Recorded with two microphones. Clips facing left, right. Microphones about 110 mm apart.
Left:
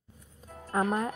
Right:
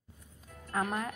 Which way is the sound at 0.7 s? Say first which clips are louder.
Left 5 dB; 30° left (ahead or behind).